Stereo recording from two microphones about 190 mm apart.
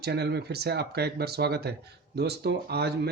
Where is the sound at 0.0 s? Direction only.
60° right (ahead or behind).